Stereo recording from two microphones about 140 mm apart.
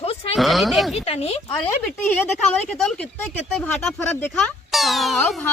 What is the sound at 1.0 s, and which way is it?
Speech, 45° left (ahead or behind).